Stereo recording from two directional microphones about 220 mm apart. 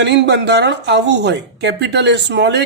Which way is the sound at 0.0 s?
50° right (ahead or behind).